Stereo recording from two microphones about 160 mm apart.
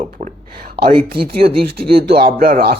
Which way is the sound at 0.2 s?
40° right (ahead or behind).